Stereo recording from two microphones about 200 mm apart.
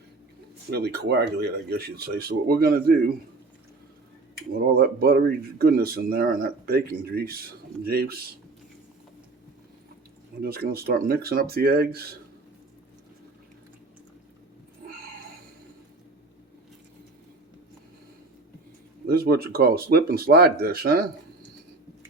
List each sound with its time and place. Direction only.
0.7 s speech: 55° right (ahead or behind)
4.7 s speech: 50° right (ahead or behind)
10.4 s speech: 50° right (ahead or behind)
19.0 s speech: 50° right (ahead or behind)